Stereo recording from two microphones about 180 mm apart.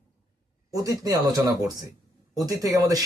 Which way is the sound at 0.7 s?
20° right (ahead or behind).